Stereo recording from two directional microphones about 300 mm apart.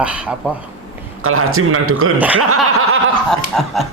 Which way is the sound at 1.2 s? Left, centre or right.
Right.